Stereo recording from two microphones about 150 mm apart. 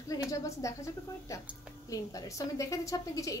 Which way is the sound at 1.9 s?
20° left (ahead or behind).